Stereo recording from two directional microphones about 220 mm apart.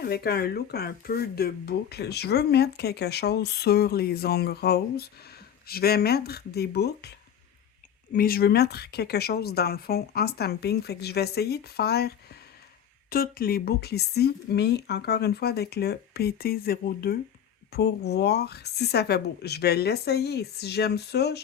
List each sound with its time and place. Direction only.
0.0 s speech: 45° left (ahead or behind)